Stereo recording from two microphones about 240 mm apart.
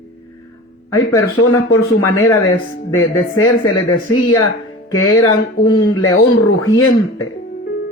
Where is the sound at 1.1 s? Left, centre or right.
Left.